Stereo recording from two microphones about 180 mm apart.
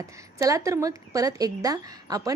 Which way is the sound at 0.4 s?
15° right (ahead or behind).